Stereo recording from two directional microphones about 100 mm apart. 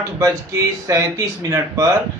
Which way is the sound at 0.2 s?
30° right (ahead or behind).